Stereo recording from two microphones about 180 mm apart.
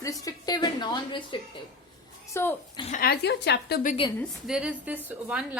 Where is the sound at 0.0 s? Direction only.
20° left (ahead or behind).